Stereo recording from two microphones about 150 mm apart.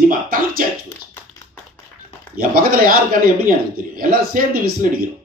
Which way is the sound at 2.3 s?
70° right (ahead or behind).